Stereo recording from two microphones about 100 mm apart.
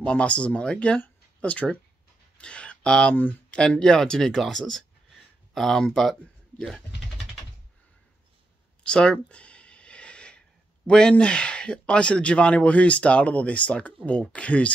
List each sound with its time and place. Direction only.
0.0 s speech: 10° left (ahead or behind)
8.8 s a sound: 10° left (ahead or behind)
10.9 s speech: 10° left (ahead or behind)